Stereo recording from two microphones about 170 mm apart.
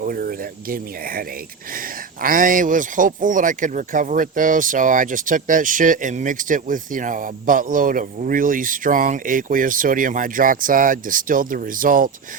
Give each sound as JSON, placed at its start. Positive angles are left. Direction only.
{"t": 0.0, "sound": "speech", "side_deg": -60}
{"t": 2.2, "sound": "speech", "side_deg": -55}